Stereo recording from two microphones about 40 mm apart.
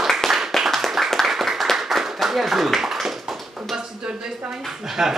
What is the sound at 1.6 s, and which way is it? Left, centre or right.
Clapping, centre.